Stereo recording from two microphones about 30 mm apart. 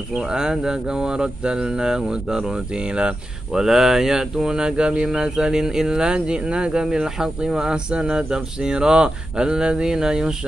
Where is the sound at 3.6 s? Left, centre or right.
Centre; by 6.8 s right.